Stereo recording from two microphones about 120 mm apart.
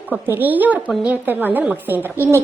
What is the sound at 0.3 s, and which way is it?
A woman's voice, 15° right (ahead or behind).